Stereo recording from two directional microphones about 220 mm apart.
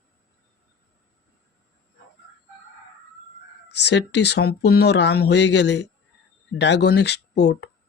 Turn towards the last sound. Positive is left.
turn(degrees=50)  # may be behind; listen again after turning